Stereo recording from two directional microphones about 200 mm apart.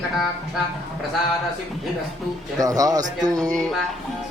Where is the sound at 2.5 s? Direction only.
15° right (ahead or behind).